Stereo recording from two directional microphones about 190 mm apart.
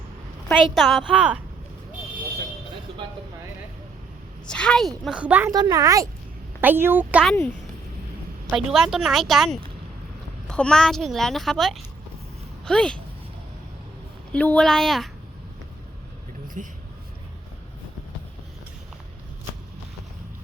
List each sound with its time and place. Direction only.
0.6 s a child's voice: centre (ahead or behind)
4.4 s a child's voice: 5° left (ahead or behind)
5.5 s speech: 20° right (ahead or behind)
8.4 s a child's voice: centre (ahead or behind)
14.3 s a child's voice: 5° left (ahead or behind)
16.6 s speech: 45° right (ahead or behind)